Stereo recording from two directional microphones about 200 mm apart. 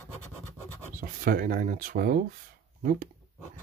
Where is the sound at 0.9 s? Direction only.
45° right (ahead or behind).